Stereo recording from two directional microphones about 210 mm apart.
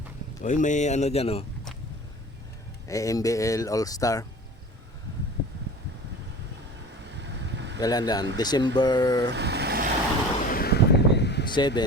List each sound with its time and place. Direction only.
0.4 s speech: 35° left (ahead or behind)
2.8 s speech: 15° left (ahead or behind)
7.1 s vehicle: 55° right (ahead or behind)
7.8 s speech: 20° left (ahead or behind)
9.3 s vehicle: 55° right (ahead or behind)
10.4 s a sound: 45° left (ahead or behind)
11.5 s speech: 20° left (ahead or behind)